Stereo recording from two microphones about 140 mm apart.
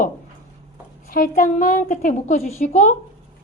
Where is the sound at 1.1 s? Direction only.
90° left; by 2.9 s 60° left (ahead or behind).